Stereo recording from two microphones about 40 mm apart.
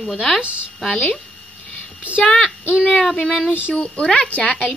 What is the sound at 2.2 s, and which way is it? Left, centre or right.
Speech, left.